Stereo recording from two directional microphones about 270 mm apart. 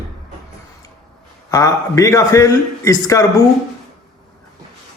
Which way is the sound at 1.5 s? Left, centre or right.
Centre.